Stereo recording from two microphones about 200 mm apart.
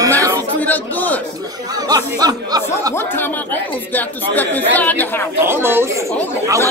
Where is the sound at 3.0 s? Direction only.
10° left (ahead or behind).